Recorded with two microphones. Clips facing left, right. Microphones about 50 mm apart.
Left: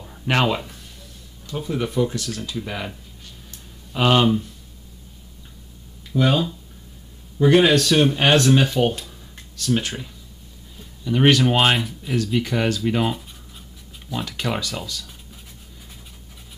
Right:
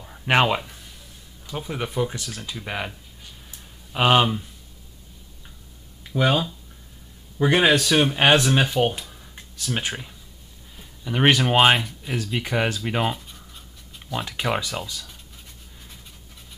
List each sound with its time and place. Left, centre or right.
0.0 s a sound: centre
1.5 s speech: centre
3.9 s speech: centre
6.1 s speech: centre
14.1 s speech: centre